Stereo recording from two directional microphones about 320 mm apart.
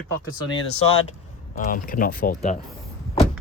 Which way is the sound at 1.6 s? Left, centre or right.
Left.